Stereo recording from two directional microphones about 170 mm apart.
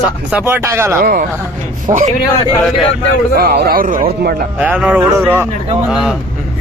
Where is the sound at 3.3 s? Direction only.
65° right (ahead or behind).